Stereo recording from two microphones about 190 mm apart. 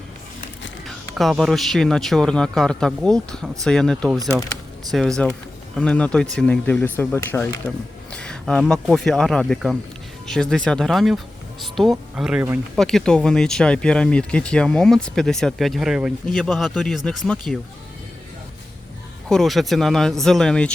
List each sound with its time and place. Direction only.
1.1 s speech: centre (ahead or behind)
4.2 s speech: 20° right (ahead or behind)
4.9 s speech: centre (ahead or behind)
19.3 s speech: centre (ahead or behind)